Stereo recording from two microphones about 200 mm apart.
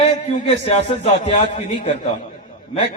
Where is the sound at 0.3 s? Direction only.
30° left (ahead or behind).